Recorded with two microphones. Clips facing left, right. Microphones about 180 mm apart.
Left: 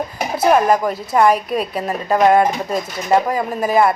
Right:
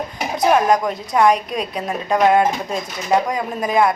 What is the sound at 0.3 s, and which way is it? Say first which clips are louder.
A woman's voice: left 1 dB; 5° left (ahead or behind).